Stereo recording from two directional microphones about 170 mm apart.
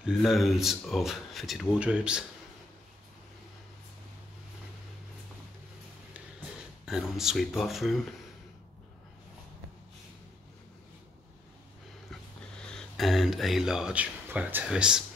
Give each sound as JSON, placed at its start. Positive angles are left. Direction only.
{"t": 0.0, "sound": "speech", "side_deg": 0}
{"t": 6.9, "sound": "speech", "side_deg": -5}
{"t": 12.1, "sound": "speech", "side_deg": 0}